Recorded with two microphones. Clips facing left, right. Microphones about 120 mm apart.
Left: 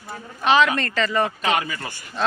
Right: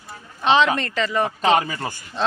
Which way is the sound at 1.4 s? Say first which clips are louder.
Right 4 dB; 30° right (ahead or behind).